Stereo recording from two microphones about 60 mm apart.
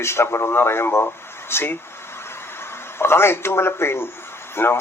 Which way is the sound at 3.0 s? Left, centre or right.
Left.